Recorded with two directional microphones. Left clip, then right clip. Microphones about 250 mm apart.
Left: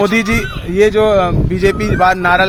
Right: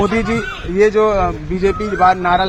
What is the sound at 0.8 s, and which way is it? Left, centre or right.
Speech, left.